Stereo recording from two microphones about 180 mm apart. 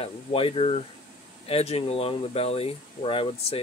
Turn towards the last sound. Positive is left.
turn(degrees=30)  # may be behind; listen again after turning